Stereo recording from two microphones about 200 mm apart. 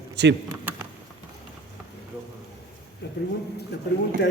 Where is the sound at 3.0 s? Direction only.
60° left (ahead or behind).